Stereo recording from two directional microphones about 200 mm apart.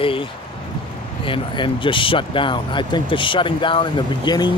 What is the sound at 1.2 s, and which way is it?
Speech, 25° left (ahead or behind).